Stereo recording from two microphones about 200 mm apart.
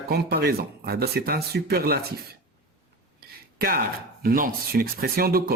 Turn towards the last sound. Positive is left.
turn(degrees=-50)  # may be behind; listen again after turning